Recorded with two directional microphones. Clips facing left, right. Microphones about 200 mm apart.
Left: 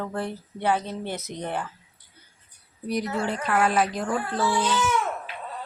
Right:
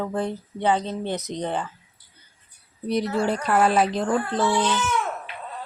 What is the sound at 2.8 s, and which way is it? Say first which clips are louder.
A woman's voice: right 4 dB; 25° right (ahead or behind).